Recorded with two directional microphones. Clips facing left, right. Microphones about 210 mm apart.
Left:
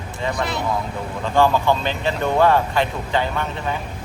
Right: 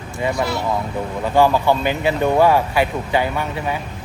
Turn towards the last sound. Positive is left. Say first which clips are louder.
# right 2 dB
turn(degrees=-10)  # may be behind; listen again after turning